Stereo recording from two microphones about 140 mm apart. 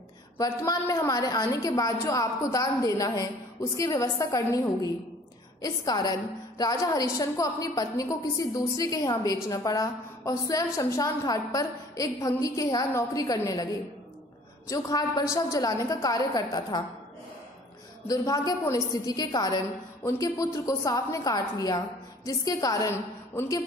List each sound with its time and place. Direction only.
0.4 s a woman's voice: 25° left (ahead or behind)
5.6 s a woman's voice: 25° left (ahead or behind)
14.7 s a woman's voice: 25° left (ahead or behind)
18.0 s a woman's voice: 25° left (ahead or behind)